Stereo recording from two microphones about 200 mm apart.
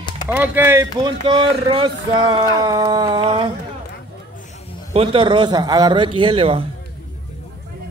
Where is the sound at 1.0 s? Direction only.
25° right (ahead or behind).